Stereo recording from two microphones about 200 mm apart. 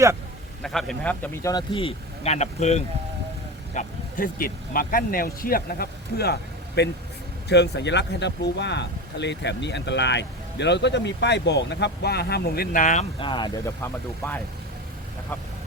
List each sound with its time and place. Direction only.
0.6 s speech: centre (ahead or behind); by 2.8 s 35° left (ahead or behind)
3.8 s speech: 45° left (ahead or behind); by 14.4 s 10° left (ahead or behind)